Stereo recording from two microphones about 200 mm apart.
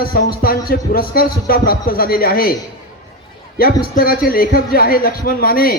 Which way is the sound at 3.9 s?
45° left (ahead or behind).